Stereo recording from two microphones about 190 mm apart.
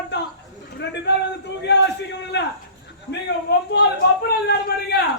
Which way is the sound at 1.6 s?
65° left (ahead or behind).